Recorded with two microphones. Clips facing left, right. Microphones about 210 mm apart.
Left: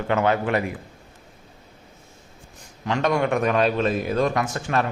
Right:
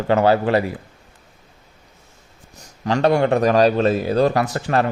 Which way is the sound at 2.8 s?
35° right (ahead or behind).